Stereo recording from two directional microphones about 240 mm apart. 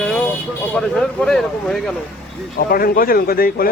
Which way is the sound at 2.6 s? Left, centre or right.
Left.